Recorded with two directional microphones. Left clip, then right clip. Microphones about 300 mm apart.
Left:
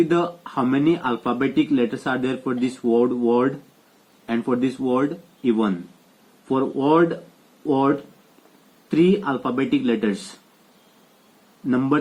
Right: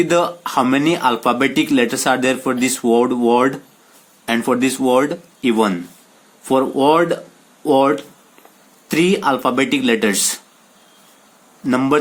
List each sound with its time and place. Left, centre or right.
0.1 s speech: right
11.7 s speech: right